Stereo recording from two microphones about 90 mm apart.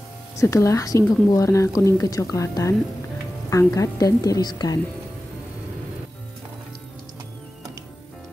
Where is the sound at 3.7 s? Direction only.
40° left (ahead or behind).